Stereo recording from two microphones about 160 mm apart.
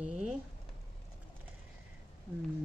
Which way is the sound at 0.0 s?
5° right (ahead or behind).